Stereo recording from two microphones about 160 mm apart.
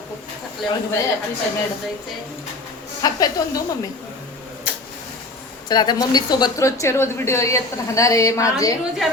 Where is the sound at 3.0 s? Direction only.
25° left (ahead or behind).